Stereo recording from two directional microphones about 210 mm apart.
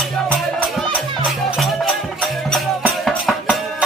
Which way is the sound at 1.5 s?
Centre (ahead or behind).